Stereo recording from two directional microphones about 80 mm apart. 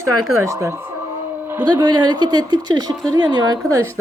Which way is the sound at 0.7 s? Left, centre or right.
Right.